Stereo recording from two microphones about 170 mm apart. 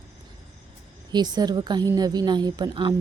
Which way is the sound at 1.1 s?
25° right (ahead or behind).